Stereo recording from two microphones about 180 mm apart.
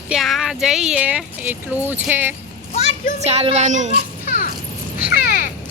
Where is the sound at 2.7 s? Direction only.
45° left (ahead or behind).